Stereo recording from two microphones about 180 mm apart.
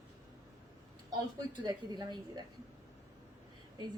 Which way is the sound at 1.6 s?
25° right (ahead or behind).